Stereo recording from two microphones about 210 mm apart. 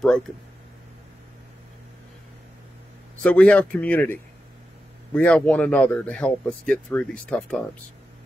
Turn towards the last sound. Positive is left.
turn(degrees=5)  # may be behind; listen again after turning